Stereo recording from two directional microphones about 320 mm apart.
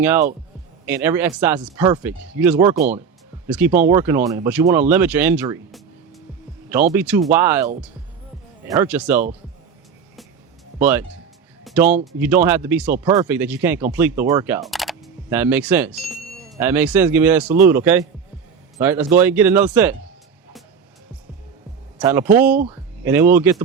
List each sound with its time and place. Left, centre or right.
0.0 s speech: centre
10.8 s speech: centre
11.6 s music: centre
12.2 s speech: centre
21.9 s speech: centre
22.4 s speech: right
23.0 s speech: centre